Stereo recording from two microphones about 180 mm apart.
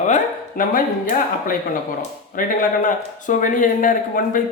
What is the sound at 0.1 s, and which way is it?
Speech, 50° left (ahead or behind).